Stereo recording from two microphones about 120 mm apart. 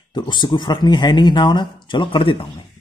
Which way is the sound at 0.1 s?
40° left (ahead or behind).